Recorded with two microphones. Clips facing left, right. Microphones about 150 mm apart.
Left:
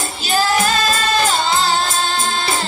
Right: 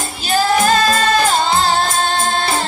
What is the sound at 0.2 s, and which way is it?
Music, 45° right (ahead or behind).